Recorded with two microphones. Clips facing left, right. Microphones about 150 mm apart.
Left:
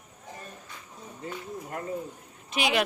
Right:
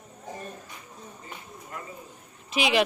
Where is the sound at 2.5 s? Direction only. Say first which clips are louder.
Right 3 dB; centre (ahead or behind).